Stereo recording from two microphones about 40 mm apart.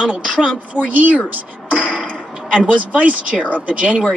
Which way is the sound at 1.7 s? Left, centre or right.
Right.